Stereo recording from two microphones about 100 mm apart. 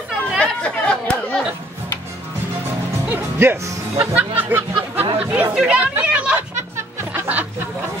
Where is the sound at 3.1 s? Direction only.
25° right (ahead or behind).